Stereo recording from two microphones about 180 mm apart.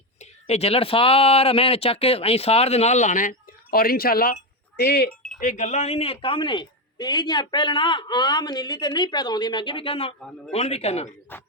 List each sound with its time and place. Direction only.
0.2 s speech: 35° left (ahead or behind); by 5.0 s 65° left (ahead or behind)
5.0 s a sound: 5° left (ahead or behind)
5.4 s a man's voice: 45° left (ahead or behind)
10.2 s a man's voice: 5° left (ahead or behind)
10.5 s speech: 35° left (ahead or behind)
11.3 s a sound: 10° left (ahead or behind)